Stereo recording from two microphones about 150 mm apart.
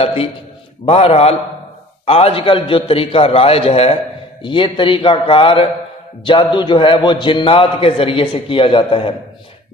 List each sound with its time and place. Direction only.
0.0 s a man's voice: 40° left (ahead or behind)